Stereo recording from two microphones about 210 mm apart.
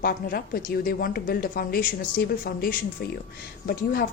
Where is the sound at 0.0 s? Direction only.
45° left (ahead or behind).